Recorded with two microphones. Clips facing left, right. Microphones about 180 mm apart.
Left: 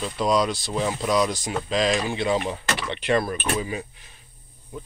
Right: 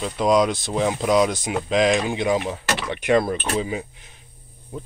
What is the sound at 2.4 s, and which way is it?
Speech, 5° right (ahead or behind).